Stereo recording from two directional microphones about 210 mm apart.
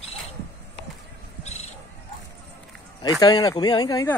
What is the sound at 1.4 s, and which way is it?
Horse, 30° left (ahead or behind).